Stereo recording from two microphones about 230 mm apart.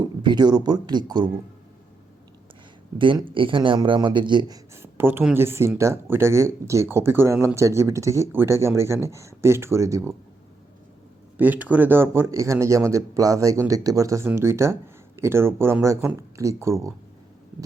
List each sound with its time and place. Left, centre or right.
0.0 s speech: centre
3.0 s speech: right
11.3 s speech: centre